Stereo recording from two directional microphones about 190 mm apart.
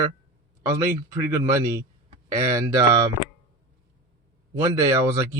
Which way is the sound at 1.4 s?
15° right (ahead or behind).